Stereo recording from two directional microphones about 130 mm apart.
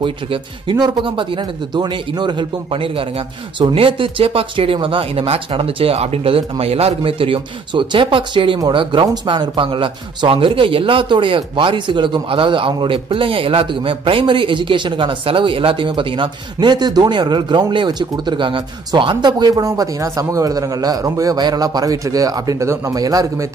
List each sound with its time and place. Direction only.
0.0 s a man's voice: 40° right (ahead or behind)